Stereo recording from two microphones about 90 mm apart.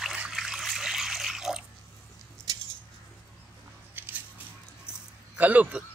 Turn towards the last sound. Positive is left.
turn(degrees=-15)  # may be behind; listen again after turning